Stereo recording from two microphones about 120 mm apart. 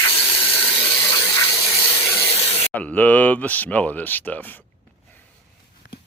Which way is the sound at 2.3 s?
60° left (ahead or behind).